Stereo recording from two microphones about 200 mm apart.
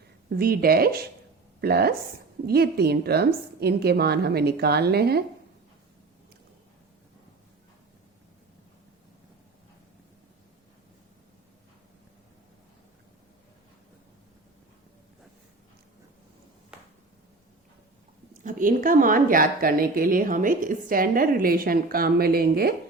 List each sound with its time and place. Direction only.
0.3 s a woman's voice: 50° right (ahead or behind)
18.4 s a woman's voice: 40° right (ahead or behind)